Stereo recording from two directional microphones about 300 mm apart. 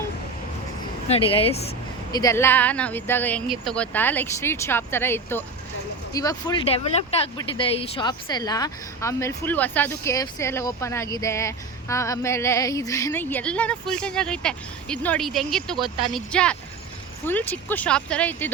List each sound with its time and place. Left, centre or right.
1.0 s a woman's voice: centre